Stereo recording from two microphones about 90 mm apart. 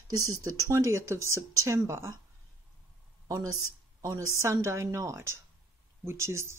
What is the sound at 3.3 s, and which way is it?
Speech, 40° right (ahead or behind).